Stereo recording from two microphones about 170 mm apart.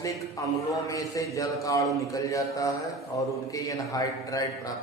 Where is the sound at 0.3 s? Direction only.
20° left (ahead or behind).